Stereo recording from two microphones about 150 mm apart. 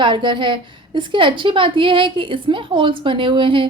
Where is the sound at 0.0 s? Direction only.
30° right (ahead or behind).